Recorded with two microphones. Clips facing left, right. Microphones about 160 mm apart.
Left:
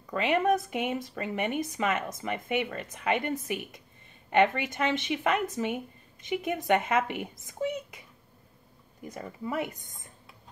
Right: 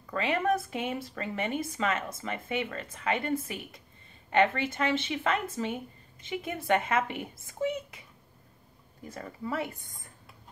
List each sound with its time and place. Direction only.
0.0 s speech: 15° left (ahead or behind)
9.0 s speech: 15° left (ahead or behind)